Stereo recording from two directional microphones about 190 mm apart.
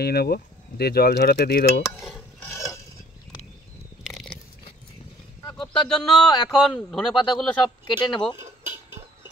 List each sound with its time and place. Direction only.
0.0 s speech: 55° left (ahead or behind)
1.8 s cutlery: centre (ahead or behind)
2.4 s stir: 15° left (ahead or behind)
4.1 s a sound: centre (ahead or behind)
5.5 s a sound: 5° left (ahead or behind)
6.0 s speech: centre (ahead or behind)
7.8 s speech: 25° left (ahead or behind)